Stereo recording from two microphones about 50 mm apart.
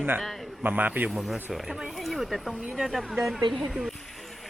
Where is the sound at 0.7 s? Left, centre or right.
Right.